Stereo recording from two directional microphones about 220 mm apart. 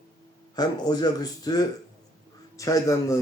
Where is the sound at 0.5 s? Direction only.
20° left (ahead or behind).